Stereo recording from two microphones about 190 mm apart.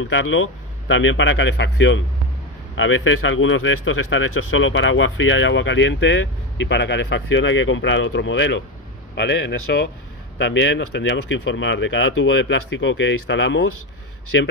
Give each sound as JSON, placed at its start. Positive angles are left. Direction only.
{"t": 0.0, "sound": "speech", "side_deg": 90}
{"t": 2.7, "sound": "speech", "side_deg": 90}
{"t": 9.1, "sound": "a man's voice", "side_deg": 65}
{"t": 10.4, "sound": "speech", "side_deg": 75}